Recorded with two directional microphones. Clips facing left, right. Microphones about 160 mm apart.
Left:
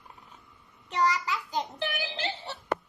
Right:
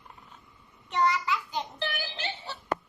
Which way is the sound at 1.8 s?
20° left (ahead or behind).